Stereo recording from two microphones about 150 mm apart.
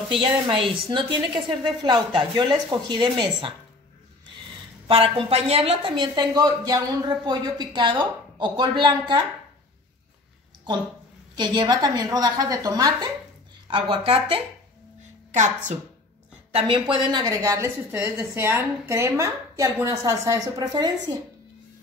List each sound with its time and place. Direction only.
0.1 s speech: 35° right (ahead or behind)
4.8 s a woman's voice: 40° right (ahead or behind)
11.3 s a woman's voice: 30° right (ahead or behind)
15.3 s a woman's voice: 55° right (ahead or behind)
16.5 s speech: 35° right (ahead or behind)
17.9 s a woman's voice: 15° right (ahead or behind)